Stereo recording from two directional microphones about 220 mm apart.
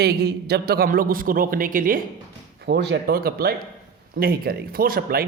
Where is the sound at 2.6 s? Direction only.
50° right (ahead or behind).